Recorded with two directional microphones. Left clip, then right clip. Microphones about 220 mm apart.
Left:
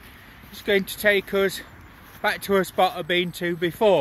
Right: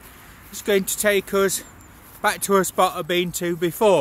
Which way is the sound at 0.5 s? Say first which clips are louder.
Right 2 dB; 15° right (ahead or behind).